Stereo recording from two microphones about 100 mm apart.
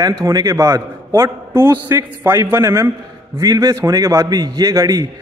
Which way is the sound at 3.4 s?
35° right (ahead or behind).